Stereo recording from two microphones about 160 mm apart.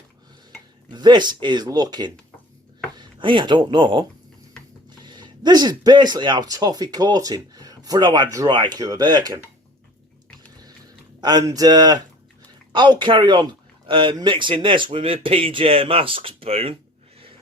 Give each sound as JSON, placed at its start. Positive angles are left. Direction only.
{"t": 0.9, "sound": "speech", "side_deg": -25}
{"t": 11.2, "sound": "speech", "side_deg": -25}